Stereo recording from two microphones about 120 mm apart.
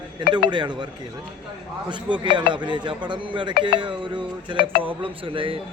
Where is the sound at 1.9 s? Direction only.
40° right (ahead or behind).